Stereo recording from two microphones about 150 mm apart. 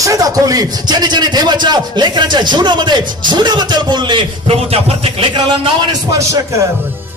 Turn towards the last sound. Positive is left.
turn(degrees=-25)  # may be behind; listen again after turning